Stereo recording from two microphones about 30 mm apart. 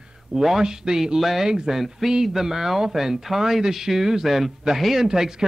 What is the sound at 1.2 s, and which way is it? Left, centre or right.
Speech, centre.